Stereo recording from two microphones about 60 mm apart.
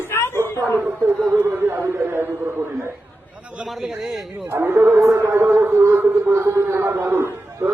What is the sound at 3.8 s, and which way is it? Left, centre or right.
Speech, centre.